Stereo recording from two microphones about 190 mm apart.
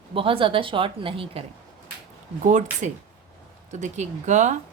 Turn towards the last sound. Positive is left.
turn(degrees=-40)  # may be behind; listen again after turning